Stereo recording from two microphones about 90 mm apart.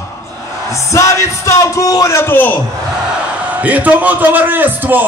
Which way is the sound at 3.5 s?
15° right (ahead or behind).